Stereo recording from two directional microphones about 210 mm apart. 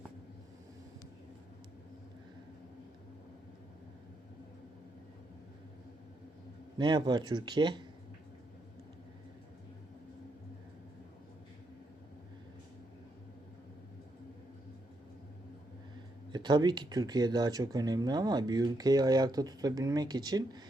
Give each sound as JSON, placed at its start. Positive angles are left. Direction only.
{"t": 6.7, "sound": "speech", "side_deg": -20}
{"t": 16.3, "sound": "speech", "side_deg": -20}